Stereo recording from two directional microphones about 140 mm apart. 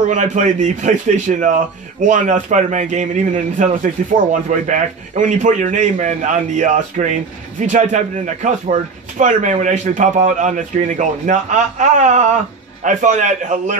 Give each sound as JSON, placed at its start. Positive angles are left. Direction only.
{"t": 0.1, "sound": "a man's voice", "side_deg": -60}